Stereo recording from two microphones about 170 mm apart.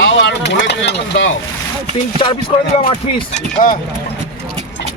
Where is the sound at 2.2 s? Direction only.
30° left (ahead or behind).